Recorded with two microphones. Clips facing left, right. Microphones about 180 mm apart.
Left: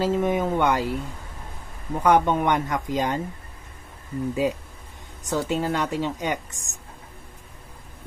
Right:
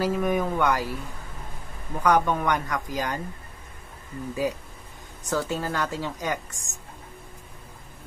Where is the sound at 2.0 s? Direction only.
25° left (ahead or behind).